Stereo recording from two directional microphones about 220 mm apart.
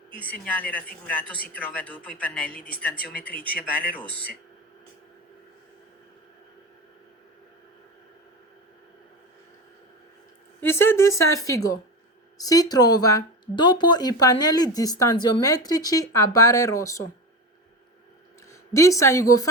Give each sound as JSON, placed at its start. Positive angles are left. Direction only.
{"t": 0.4, "sound": "speech", "side_deg": 5}
{"t": 10.6, "sound": "speech", "side_deg": 10}
{"t": 18.7, "sound": "speech", "side_deg": 15}